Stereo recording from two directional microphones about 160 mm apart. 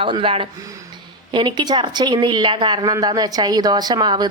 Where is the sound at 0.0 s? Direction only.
35° right (ahead or behind).